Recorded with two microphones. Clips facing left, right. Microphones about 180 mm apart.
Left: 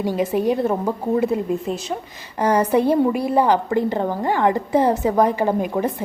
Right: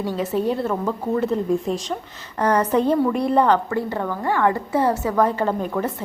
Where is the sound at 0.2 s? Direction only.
15° left (ahead or behind).